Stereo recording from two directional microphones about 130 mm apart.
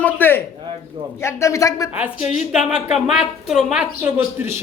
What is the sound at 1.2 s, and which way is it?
Speech, 20° left (ahead or behind).